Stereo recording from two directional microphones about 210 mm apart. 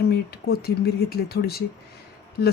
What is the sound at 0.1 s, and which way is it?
Speech, 50° left (ahead or behind).